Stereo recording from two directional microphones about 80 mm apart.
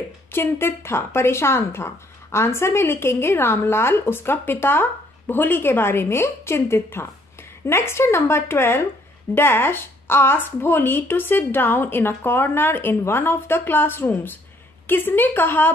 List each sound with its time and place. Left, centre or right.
0.3 s a woman's voice: left